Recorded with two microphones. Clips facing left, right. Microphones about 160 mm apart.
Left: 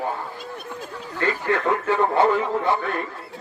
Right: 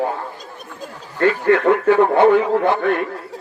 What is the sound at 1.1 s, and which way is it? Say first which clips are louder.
Radio: right 8 dB; 60° right (ahead or behind).